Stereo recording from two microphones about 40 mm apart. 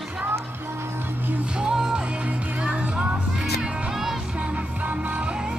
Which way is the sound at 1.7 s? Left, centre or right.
Centre.